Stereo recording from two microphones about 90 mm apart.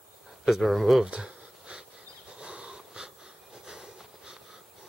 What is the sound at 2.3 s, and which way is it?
Wheeze, 10° right (ahead or behind).